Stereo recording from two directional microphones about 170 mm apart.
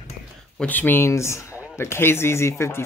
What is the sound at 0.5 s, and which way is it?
Speech, 10° left (ahead or behind).